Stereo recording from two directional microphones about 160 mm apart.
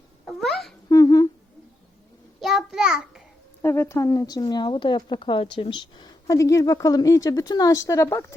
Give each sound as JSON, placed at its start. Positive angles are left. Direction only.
{"t": 0.3, "sound": "babbling", "side_deg": 0}
{"t": 0.9, "sound": "humming", "side_deg": 20}
{"t": 2.4, "sound": "child singing", "side_deg": 0}
{"t": 3.6, "sound": "speech", "side_deg": 15}